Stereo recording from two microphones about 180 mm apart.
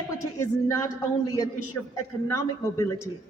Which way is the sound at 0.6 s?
20° left (ahead or behind).